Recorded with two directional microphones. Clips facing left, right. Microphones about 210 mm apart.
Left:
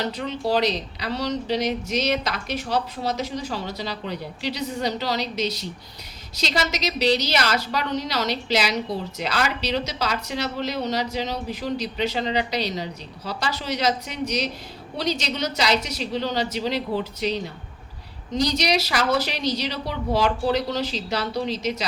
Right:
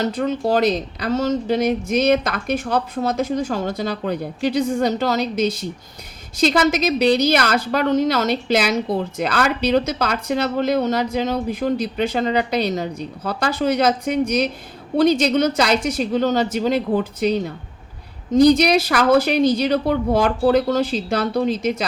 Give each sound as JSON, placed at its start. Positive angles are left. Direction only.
{"t": 0.0, "sound": "a woman's voice", "side_deg": -50}